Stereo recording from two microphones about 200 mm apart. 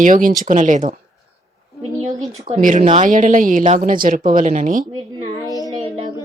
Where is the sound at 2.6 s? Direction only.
40° right (ahead or behind).